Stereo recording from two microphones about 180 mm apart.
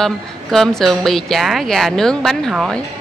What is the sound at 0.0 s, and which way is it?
A woman's voice, centre (ahead or behind).